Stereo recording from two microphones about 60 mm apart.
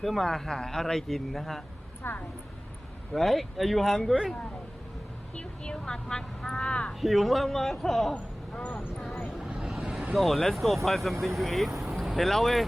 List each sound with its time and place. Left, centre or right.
0.0 s speech: centre
2.0 s a woman's voice: left
3.1 s speech: centre
5.3 s speech: centre
7.0 s speech: centre
8.1 s speech: left
9.5 s vehicle: centre
10.2 s speech: centre